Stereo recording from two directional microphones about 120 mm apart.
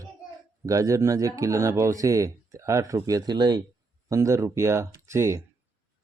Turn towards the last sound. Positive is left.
turn(degrees=-25)  # may be behind; listen again after turning